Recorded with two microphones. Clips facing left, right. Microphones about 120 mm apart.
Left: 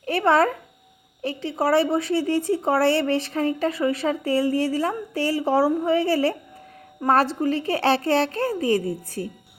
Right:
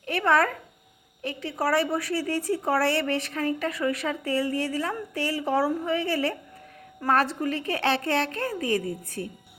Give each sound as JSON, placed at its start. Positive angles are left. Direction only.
{"t": 0.0, "sound": "a woman's voice", "side_deg": 30}